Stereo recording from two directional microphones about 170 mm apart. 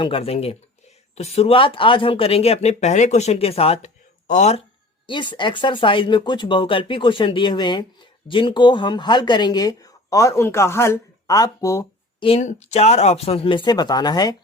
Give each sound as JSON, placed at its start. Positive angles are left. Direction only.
{"t": 0.0, "sound": "speech", "side_deg": 35}
{"t": 5.0, "sound": "speech", "side_deg": 30}
{"t": 12.2, "sound": "speech", "side_deg": 40}